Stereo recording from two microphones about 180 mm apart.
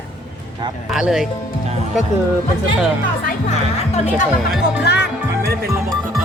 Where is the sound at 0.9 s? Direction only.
5° right (ahead or behind).